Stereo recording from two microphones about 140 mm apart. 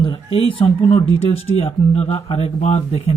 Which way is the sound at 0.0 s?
40° left (ahead or behind).